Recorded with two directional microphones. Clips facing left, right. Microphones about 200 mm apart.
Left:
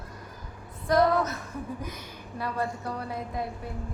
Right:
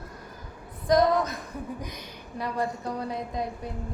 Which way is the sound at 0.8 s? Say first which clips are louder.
Right 1 dB; 15° right (ahead or behind).